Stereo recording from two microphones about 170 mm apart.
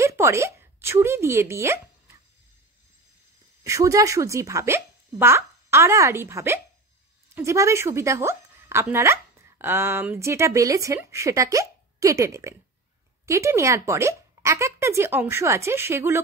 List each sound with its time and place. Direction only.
0.0 s speech: 15° right (ahead or behind)
3.6 s a woman's voice: 20° right (ahead or behind)